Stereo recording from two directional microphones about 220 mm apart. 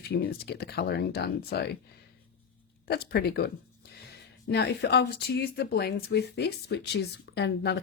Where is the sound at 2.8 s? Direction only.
45° left (ahead or behind).